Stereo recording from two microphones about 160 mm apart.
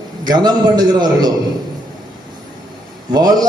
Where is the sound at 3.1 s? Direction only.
25° right (ahead or behind).